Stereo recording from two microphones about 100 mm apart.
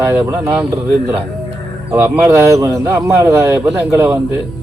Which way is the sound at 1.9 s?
25° right (ahead or behind).